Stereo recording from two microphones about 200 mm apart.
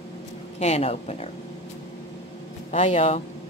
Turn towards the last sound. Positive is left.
turn(degrees=35)  # may be behind; listen again after turning